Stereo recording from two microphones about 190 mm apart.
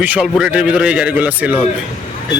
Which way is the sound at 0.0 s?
5° right (ahead or behind).